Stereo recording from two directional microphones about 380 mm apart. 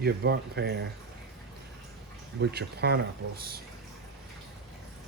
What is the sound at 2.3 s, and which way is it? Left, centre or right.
Speech, right.